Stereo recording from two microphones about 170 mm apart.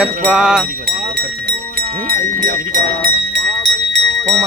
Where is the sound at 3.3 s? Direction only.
90° right.